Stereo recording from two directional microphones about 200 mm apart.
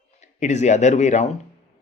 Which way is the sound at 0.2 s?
35° left (ahead or behind).